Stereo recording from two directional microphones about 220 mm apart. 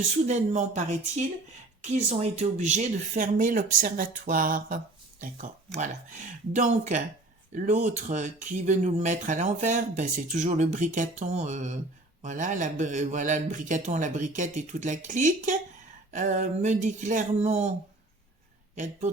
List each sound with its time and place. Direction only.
0.3 s a man's voice: 30° right (ahead or behind)
18.8 s a man's voice: 35° right (ahead or behind)